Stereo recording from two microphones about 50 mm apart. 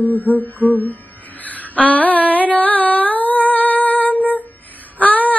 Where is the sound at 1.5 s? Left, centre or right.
Left.